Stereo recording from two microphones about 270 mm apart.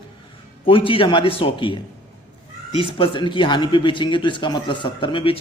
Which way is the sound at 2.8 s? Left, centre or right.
Centre.